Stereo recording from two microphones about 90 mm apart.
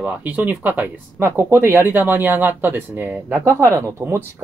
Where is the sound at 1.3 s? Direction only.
30° right (ahead or behind).